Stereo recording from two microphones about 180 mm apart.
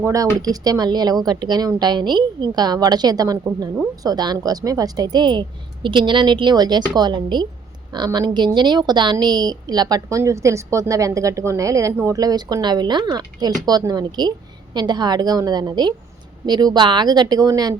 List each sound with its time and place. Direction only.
0.0 s a woman's voice: 20° right (ahead or behind)